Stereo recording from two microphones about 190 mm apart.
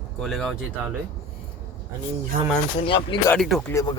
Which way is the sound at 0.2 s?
Centre (ahead or behind).